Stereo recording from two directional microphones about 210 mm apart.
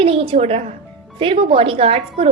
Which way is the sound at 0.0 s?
25° right (ahead or behind).